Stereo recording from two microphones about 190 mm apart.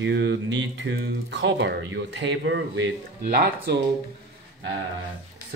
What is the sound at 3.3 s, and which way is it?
Speech, 50° right (ahead or behind).